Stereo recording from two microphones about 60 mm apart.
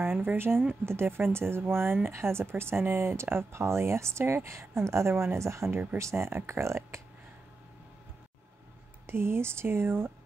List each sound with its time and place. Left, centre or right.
0.0 s speech: right
9.0 s speech: right